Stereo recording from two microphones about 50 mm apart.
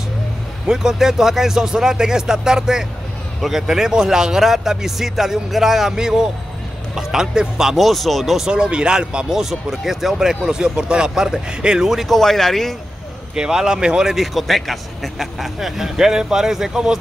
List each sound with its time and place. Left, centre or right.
0.7 s speech: centre
8.4 s speech: centre
12.1 s speech: centre
13.3 s speech: centre